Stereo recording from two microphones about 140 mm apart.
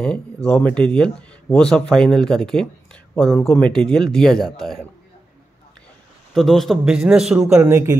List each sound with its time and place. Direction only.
0.5 s speech: 10° left (ahead or behind)
6.3 s speech: centre (ahead or behind)
7.6 s speech: 20° right (ahead or behind)